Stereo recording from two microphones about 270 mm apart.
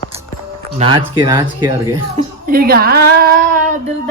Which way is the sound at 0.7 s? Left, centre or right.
Centre.